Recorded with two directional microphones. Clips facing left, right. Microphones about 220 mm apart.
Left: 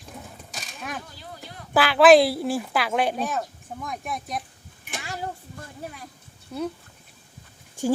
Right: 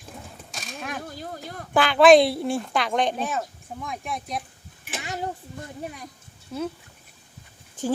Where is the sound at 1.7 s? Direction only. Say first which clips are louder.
Even; 5° left (ahead or behind).